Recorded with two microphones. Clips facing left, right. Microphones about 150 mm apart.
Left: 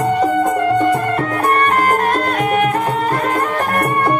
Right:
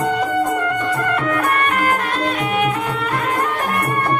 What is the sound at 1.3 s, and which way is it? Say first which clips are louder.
Music: left 3 dB; 35° left (ahead or behind).